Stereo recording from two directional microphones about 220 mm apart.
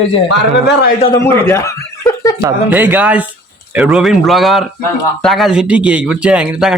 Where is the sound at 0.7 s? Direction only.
50° left (ahead or behind).